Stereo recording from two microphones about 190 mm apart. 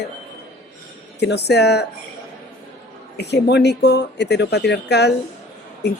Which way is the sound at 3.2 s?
65° left (ahead or behind).